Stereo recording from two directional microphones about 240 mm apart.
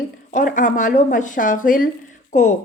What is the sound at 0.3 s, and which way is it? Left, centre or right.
Speech, left.